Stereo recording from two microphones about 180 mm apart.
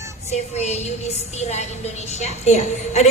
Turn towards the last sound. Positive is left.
turn(degrees=40)  # may be behind; listen again after turning